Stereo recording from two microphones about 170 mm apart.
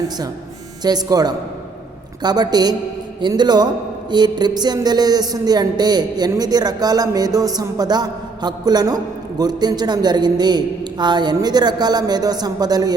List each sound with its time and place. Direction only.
0.8 s speech: 25° right (ahead or behind)